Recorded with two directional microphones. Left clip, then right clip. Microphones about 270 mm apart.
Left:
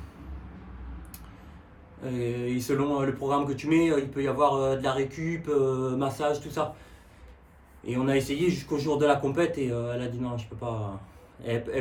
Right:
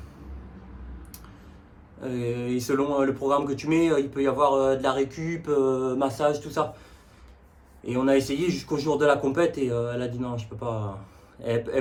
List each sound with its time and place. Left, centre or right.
2.0 s speech: centre
7.9 s speech: centre